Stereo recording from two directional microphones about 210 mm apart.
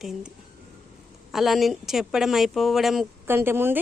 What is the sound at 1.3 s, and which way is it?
A woman's voice, centre (ahead or behind).